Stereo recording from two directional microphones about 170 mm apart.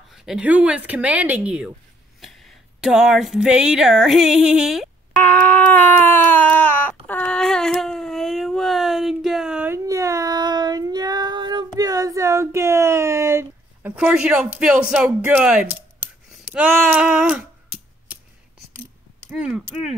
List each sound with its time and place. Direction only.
0.1 s speech: 5° right (ahead or behind)
2.8 s speech: 5° right (ahead or behind)
5.1 s a sound: 10° left (ahead or behind); by 9.8 s 5° right (ahead or behind)
9.8 s child singing: 20° right (ahead or behind)
16.5 s scissors: 5° right (ahead or behind)
19.3 s speech: 5° right (ahead or behind)